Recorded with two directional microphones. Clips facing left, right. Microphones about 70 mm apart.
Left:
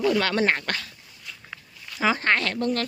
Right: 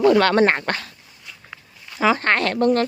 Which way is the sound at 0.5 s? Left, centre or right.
Right.